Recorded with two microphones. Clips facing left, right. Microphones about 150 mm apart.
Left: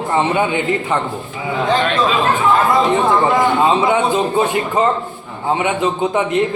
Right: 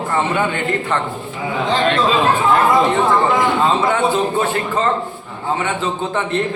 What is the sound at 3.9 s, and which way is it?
Speech, 15° left (ahead or behind).